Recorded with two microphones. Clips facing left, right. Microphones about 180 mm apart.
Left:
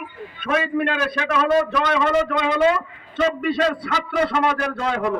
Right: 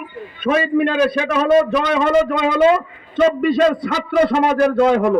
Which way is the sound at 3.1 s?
40° right (ahead or behind).